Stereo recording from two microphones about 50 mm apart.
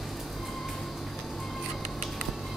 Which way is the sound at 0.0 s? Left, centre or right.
Centre.